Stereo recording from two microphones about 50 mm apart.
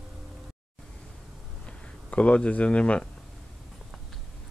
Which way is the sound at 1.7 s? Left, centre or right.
Left.